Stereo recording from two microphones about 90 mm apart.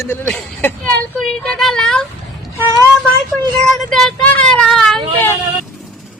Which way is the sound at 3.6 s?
5° left (ahead or behind).